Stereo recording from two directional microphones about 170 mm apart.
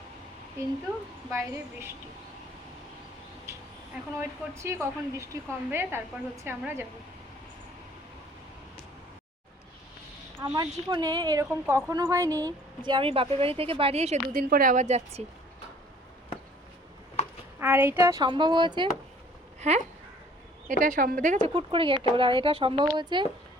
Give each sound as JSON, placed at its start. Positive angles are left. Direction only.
{"t": 0.6, "sound": "a woman's voice", "side_deg": -20}
{"t": 4.2, "sound": "a woman's voice", "side_deg": -15}
{"t": 10.5, "sound": "a woman's voice", "side_deg": -25}
{"t": 14.3, "sound": "speech", "side_deg": -55}
{"t": 17.6, "sound": "speech", "side_deg": -15}
{"t": 19.5, "sound": "a sound", "side_deg": -40}
{"t": 20.7, "sound": "speech", "side_deg": -50}
{"t": 21.5, "sound": "speech", "side_deg": -30}